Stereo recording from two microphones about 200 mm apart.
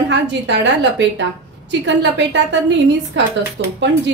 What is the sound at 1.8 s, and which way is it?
A woman's voice, 65° right (ahead or behind).